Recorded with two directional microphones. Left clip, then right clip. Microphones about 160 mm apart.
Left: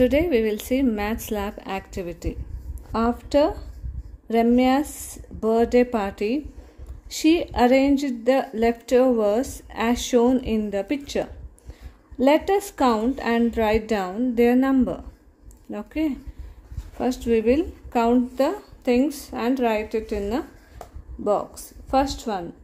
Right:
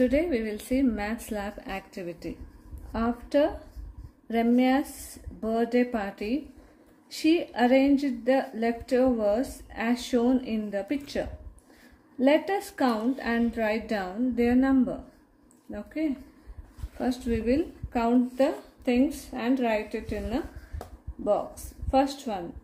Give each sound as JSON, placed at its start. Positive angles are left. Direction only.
{"t": 0.0, "sound": "a woman's voice", "side_deg": 45}
{"t": 21.9, "sound": "a woman's voice", "side_deg": 45}